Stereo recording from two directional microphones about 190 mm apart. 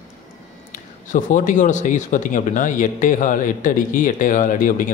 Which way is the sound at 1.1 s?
45° left (ahead or behind).